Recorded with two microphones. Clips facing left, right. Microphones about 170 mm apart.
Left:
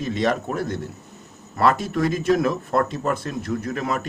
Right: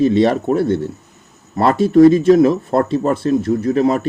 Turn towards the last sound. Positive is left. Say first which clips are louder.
# right 11 dB
turn(degrees=-30)  # may be behind; listen again after turning